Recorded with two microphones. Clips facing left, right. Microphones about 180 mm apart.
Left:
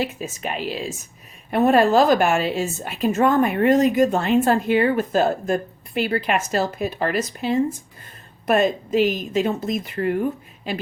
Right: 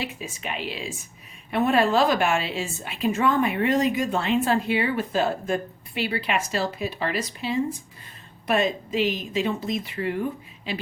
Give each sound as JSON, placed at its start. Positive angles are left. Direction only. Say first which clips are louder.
{"t": 0.0, "sound": "a woman's voice", "louder": "left 6 dB", "side_deg": 45}